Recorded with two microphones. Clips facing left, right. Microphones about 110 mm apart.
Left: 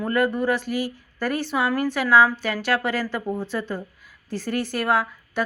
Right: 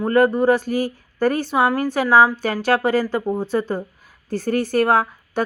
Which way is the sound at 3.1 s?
25° right (ahead or behind).